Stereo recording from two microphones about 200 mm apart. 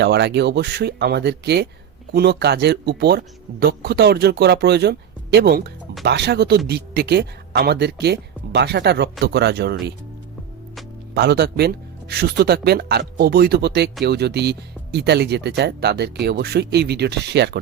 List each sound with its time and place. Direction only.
0.0 s speech: 60° right (ahead or behind)
11.1 s speech: 55° right (ahead or behind)